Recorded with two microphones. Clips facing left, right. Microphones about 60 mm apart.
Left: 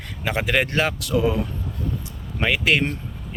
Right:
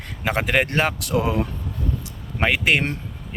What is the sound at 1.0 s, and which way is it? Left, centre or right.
Speech, right.